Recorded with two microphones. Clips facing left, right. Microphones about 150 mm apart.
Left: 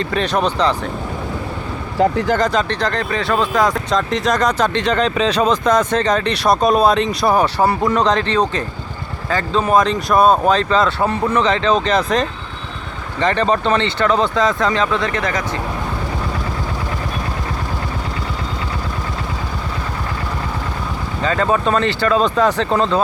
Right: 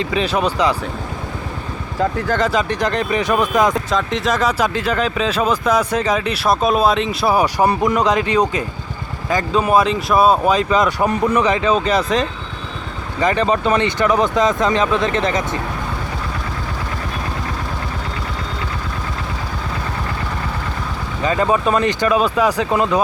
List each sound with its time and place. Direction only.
0.0 s speech: 5° right (ahead or behind)
2.0 s speech: 25° left (ahead or behind)
2.4 s speech: 5° right (ahead or behind)
3.9 s speech: centre (ahead or behind); by 15.4 s 25° right (ahead or behind)
21.2 s speech: 15° right (ahead or behind)